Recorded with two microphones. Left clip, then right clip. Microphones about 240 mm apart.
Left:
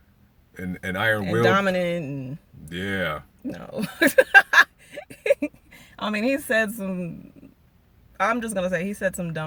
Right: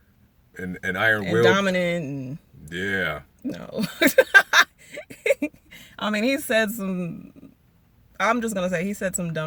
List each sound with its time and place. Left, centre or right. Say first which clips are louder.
0.5 s speech: right 2 dB; centre
1.5 s speech: left 1 dB; centre
2.6 s speech: right 2 dB; centre
3.4 s speech: right 4 dB; centre